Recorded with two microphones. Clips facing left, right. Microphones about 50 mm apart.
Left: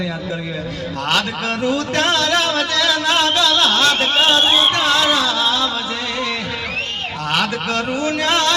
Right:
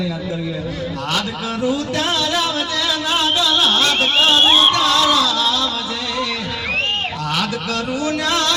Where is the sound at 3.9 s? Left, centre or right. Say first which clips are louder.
Even; left.